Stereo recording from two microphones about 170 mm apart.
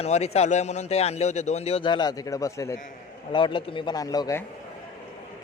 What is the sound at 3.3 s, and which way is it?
A man's voice, 30° left (ahead or behind).